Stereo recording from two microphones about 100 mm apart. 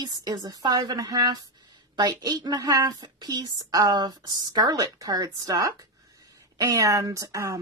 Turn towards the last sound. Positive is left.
turn(degrees=-35)  # may be behind; listen again after turning